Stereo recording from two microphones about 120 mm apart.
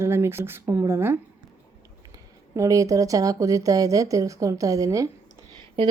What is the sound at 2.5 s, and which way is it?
Speech, 25° right (ahead or behind).